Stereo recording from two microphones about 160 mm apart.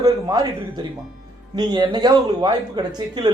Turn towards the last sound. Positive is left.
turn(degrees=-25)  # may be behind; listen again after turning